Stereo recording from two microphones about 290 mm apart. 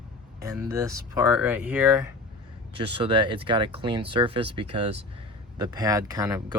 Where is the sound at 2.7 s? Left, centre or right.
Centre.